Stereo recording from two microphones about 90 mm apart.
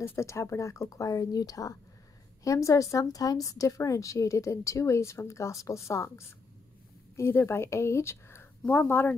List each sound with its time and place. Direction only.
0.0 s a woman's voice: 30° left (ahead or behind)